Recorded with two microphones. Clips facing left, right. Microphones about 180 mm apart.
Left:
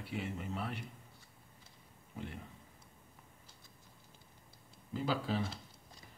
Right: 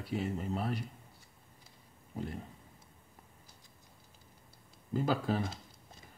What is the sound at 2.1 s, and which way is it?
Speech, 35° right (ahead or behind).